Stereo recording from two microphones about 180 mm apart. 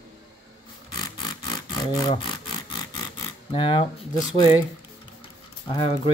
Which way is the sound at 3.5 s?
30° left (ahead or behind).